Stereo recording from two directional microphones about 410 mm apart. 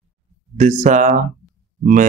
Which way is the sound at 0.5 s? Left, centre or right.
Centre.